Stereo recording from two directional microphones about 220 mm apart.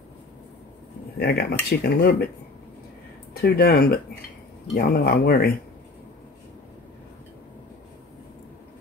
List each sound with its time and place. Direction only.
1.2 s speech: 45° left (ahead or behind)
3.3 s speech: 45° left (ahead or behind)